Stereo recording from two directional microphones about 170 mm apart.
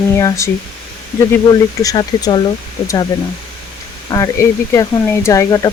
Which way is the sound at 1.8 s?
25° left (ahead or behind).